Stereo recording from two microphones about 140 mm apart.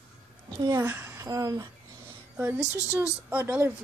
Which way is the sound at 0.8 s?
15° right (ahead or behind).